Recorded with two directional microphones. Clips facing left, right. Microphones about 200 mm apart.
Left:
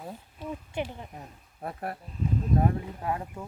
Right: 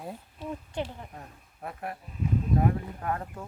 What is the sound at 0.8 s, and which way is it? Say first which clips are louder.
Speech: left 2 dB; 15° left (ahead or behind).